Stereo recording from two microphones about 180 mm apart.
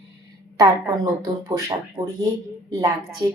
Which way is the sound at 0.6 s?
20° right (ahead or behind).